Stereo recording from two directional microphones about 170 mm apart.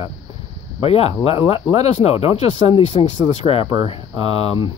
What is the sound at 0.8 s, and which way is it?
Speech, 35° left (ahead or behind).